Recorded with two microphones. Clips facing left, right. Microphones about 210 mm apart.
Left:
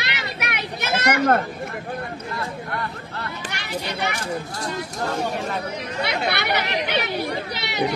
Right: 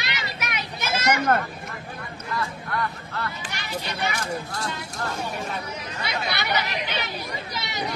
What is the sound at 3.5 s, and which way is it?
Speech, 65° left (ahead or behind).